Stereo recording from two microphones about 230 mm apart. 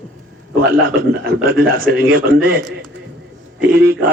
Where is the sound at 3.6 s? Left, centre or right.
Right.